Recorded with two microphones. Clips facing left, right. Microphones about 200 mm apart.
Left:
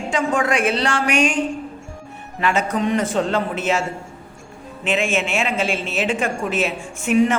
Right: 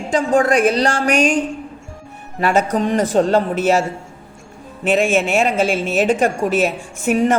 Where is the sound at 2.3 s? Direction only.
40° right (ahead or behind).